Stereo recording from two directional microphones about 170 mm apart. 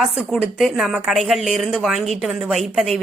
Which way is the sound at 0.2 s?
Centre (ahead or behind).